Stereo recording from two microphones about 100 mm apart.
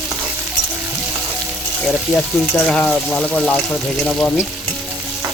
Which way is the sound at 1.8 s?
Centre (ahead or behind).